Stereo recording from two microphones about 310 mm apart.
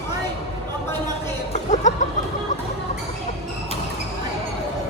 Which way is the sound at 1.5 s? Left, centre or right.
Left.